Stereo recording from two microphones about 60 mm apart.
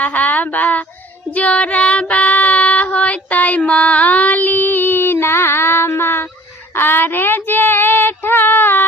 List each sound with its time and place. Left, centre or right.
0.0 s a sound: left
1.3 s female singing: left
6.7 s child singing: left